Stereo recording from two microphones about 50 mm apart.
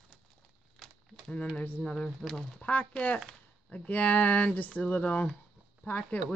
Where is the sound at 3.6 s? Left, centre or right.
Left.